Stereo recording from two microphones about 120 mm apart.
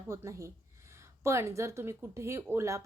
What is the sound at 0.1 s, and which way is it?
Speech, 25° right (ahead or behind).